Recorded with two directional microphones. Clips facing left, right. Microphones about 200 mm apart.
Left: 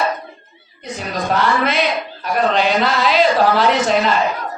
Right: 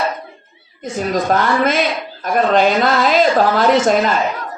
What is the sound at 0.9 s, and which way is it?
Speech, 45° right (ahead or behind).